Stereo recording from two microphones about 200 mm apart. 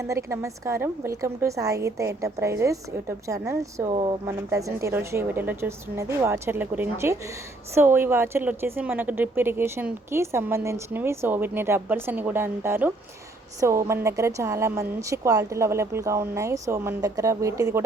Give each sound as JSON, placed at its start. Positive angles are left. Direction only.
{"t": 0.0, "sound": "speech", "side_deg": -15}